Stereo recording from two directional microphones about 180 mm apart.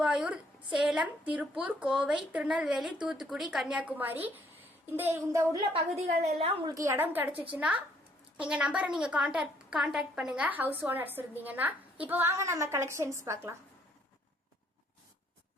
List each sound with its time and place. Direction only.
0.0 s a woman's voice: 5° right (ahead or behind)
6.4 s a woman's voice: 30° right (ahead or behind)
6.7 s a woman's voice: 15° right (ahead or behind)